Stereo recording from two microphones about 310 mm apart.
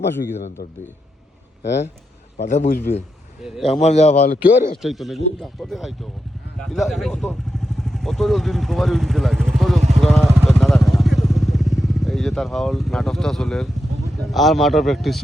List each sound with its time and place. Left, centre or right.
2.4 s a man's voice: left
3.4 s speech: centre
3.8 s a man's voice: left
4.8 s speech: centre
10.0 s vehicle: centre
14.2 s speech: centre